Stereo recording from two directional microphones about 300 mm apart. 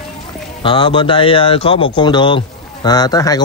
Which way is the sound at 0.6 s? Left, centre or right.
Centre.